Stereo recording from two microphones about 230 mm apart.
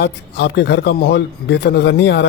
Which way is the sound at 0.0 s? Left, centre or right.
Left.